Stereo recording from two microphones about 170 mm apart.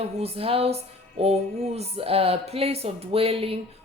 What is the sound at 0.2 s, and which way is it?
Speech, 35° right (ahead or behind).